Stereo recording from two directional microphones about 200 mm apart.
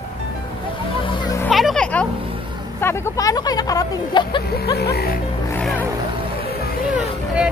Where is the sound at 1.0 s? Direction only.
25° left (ahead or behind).